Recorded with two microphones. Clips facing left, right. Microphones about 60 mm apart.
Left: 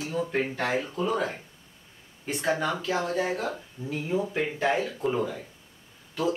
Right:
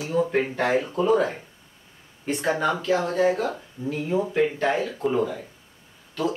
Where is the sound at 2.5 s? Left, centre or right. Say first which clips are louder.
Right 3 dB; centre.